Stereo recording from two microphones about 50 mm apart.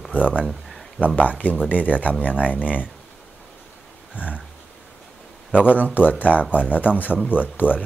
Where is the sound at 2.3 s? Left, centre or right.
Right.